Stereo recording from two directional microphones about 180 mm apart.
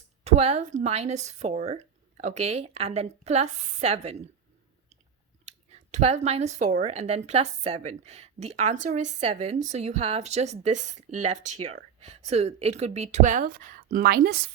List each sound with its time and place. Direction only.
0.3 s speech: 35° right (ahead or behind)
5.5 s speech: 35° right (ahead or behind); by 14.5 s 60° right (ahead or behind)